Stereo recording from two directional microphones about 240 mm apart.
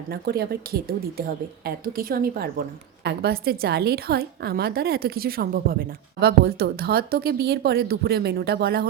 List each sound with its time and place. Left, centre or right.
0.1 s a woman's voice: right